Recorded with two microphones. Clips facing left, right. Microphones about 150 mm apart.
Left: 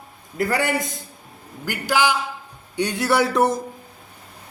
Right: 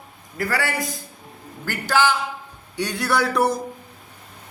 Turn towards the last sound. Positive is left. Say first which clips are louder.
# left 2 dB
turn(degrees=20)  # may be behind; listen again after turning